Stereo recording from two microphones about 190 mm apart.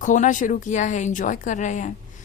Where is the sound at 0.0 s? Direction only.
40° left (ahead or behind).